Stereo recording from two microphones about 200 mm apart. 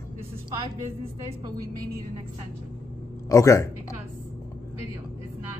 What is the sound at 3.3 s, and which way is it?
Speech, 15° left (ahead or behind).